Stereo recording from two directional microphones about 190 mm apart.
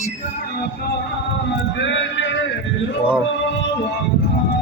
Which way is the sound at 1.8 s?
75° left (ahead or behind).